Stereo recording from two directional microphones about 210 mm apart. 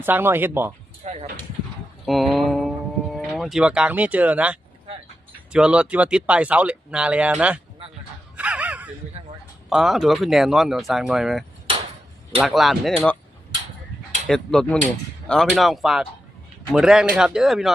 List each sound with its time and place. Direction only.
0.0 s speech: 10° right (ahead or behind)
1.0 s speech: 30° right (ahead or behind)
2.0 s speech: centre (ahead or behind)
8.4 s gasp: 5° right (ahead or behind)
9.6 s speech: centre (ahead or behind)
14.3 s speech: centre (ahead or behind)